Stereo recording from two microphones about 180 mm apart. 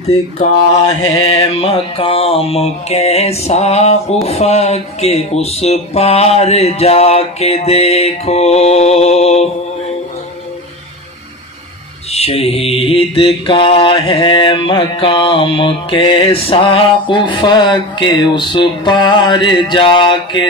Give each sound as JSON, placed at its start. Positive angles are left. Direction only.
{"t": 1.2, "sound": "mantra", "side_deg": 30}
{"t": 12.1, "sound": "mantra", "side_deg": 35}